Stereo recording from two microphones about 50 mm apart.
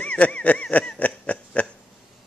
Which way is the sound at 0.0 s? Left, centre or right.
Left.